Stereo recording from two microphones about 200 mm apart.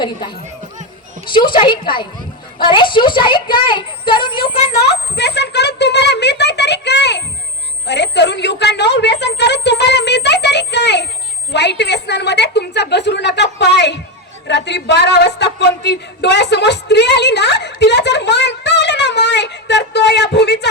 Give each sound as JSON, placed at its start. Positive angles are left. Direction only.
{"t": 1.5, "sound": "a child's voice", "side_deg": 25}
{"t": 4.9, "sound": "a sound", "side_deg": 55}
{"t": 7.9, "sound": "speech", "side_deg": 60}